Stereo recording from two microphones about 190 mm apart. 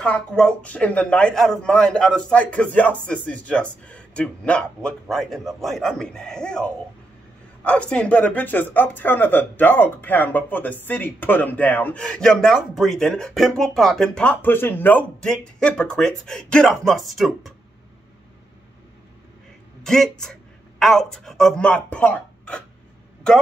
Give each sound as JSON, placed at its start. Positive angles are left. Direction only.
{"t": 0.0, "sound": "a man's voice", "side_deg": 5}
{"t": 19.8, "sound": "a man's voice", "side_deg": 5}